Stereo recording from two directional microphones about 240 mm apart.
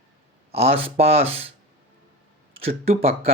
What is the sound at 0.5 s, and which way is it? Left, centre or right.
Speech, right.